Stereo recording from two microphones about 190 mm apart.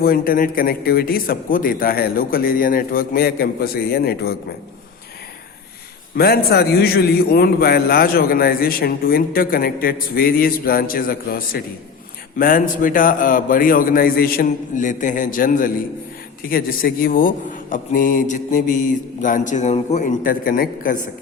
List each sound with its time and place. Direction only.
0.0 s a man's voice: 50° left (ahead or behind)
6.1 s a man's voice: 55° left (ahead or behind)